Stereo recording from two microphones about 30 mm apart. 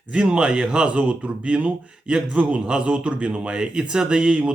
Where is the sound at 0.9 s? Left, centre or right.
Right.